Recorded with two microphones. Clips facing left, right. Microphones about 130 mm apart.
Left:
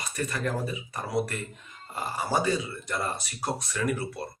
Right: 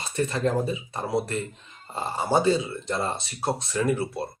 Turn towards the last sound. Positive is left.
turn(degrees=-25)  # may be behind; listen again after turning